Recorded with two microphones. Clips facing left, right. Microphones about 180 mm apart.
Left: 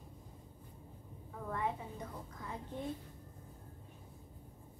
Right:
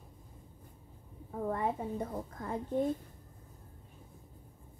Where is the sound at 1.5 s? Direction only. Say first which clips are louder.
Right 4 dB; 45° right (ahead or behind).